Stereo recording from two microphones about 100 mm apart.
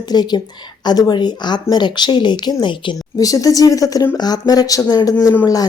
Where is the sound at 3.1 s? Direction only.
35° left (ahead or behind).